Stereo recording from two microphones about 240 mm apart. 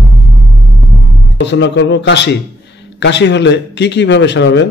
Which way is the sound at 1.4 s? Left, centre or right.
Left.